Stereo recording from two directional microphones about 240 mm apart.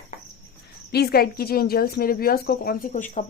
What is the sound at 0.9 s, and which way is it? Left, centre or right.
A woman's voice, left.